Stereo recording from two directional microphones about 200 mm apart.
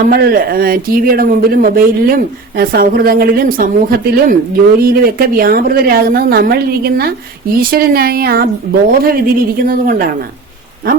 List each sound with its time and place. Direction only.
0.0 s speech: 50° right (ahead or behind)